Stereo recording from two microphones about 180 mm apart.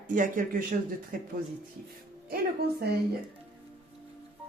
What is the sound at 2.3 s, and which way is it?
Speech, 60° right (ahead or behind).